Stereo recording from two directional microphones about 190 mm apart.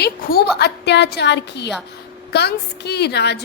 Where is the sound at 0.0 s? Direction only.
55° left (ahead or behind).